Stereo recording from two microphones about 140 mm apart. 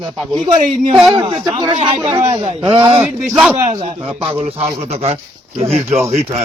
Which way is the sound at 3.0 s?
5° right (ahead or behind).